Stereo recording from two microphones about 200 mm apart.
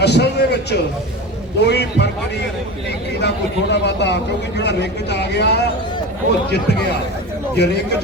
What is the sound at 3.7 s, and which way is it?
A man's voice, 60° left (ahead or behind).